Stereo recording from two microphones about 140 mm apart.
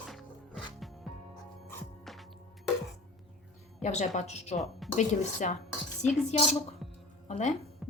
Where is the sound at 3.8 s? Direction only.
55° left (ahead or behind).